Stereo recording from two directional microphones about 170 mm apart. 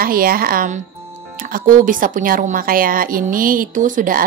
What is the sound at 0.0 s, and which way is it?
A woman's voice, 60° right (ahead or behind).